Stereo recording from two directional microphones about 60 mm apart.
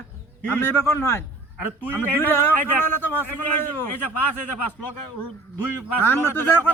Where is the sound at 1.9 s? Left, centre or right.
Left.